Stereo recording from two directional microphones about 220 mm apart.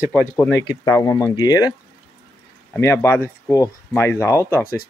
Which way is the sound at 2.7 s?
10° left (ahead or behind).